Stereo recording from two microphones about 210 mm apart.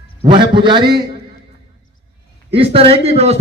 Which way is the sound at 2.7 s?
30° right (ahead or behind).